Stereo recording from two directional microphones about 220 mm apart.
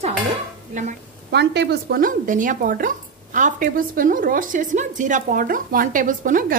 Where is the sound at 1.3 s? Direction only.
50° right (ahead or behind).